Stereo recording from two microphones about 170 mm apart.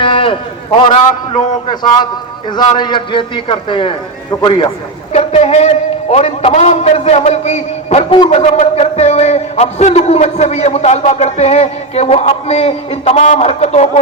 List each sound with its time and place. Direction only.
0.0 s a man's voice: 30° left (ahead or behind)